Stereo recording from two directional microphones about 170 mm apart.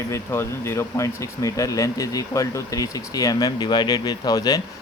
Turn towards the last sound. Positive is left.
turn(degrees=20)  # may be behind; listen again after turning